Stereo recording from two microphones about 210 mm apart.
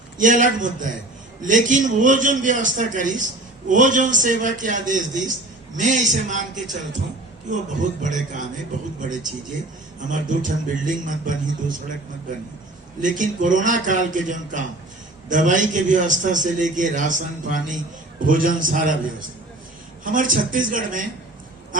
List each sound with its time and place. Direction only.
0.2 s a man's voice: 35° right (ahead or behind)
10.1 s a man's voice: 40° right (ahead or behind)
13.0 s a man's voice: 35° right (ahead or behind)